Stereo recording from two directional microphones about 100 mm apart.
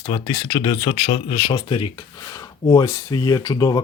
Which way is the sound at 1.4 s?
55° left (ahead or behind).